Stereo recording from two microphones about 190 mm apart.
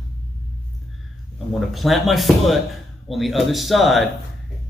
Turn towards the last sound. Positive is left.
turn(degrees=0)  # may be behind; listen again after turning